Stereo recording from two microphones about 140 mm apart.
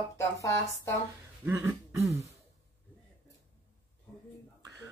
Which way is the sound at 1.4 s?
20° right (ahead or behind).